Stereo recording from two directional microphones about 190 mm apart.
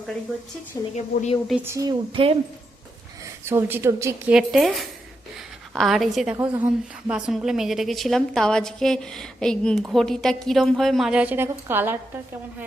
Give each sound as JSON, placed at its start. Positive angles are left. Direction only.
{"t": 0.9, "sound": "speech", "side_deg": 35}
{"t": 1.5, "sound": "a woman's voice", "side_deg": -10}
{"t": 3.4, "sound": "a woman's voice", "side_deg": -15}
{"t": 4.4, "sound": "a woman's voice", "side_deg": 0}